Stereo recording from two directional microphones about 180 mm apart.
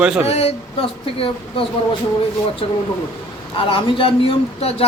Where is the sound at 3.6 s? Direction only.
30° left (ahead or behind).